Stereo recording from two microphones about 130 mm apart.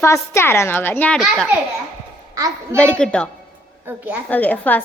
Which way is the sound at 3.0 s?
10° left (ahead or behind).